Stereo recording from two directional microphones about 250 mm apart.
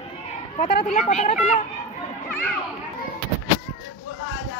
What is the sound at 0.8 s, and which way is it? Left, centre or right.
Speech, left.